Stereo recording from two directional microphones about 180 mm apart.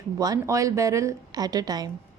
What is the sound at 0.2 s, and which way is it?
A woman's voice, 20° right (ahead or behind).